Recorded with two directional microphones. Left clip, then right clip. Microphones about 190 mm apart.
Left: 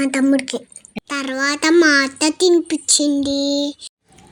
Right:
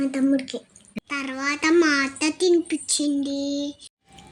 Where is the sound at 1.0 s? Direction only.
35° left (ahead or behind).